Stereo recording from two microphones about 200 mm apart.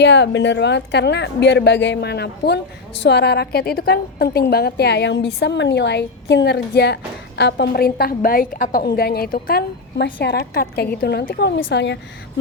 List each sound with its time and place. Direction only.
0.0 s a woman's voice: 60° left (ahead or behind)